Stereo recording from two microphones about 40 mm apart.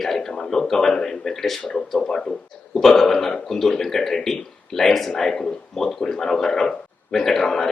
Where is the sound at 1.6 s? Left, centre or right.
Left.